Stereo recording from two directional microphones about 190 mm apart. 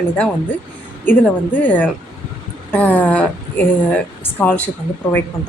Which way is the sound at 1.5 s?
10° left (ahead or behind).